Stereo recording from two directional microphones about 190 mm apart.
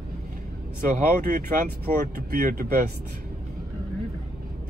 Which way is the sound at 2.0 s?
55° right (ahead or behind).